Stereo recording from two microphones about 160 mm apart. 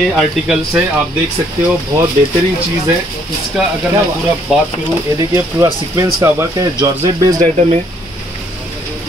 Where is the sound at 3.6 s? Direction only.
5° right (ahead or behind).